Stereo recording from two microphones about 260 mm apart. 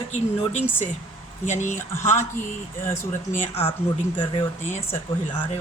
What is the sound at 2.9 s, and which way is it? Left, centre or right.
Speech, centre.